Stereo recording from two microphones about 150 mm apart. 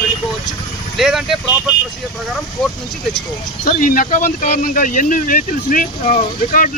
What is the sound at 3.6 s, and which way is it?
Speech, 65° left (ahead or behind).